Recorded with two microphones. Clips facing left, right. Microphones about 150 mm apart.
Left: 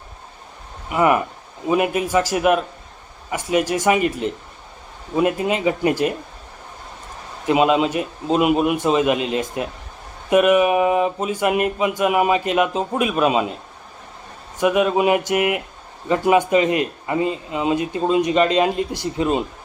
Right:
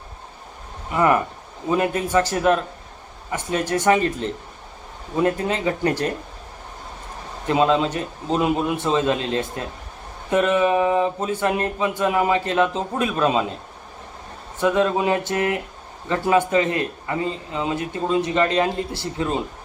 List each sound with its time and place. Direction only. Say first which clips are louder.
0.9 s speech: left 1 dB; 10° left (ahead or behind)
7.4 s speech: left 2 dB; 15° left (ahead or behind)
14.6 s speech: left 2 dB; 15° left (ahead or behind)